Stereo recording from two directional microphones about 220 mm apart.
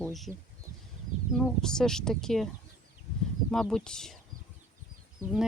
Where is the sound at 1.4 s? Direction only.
5° left (ahead or behind).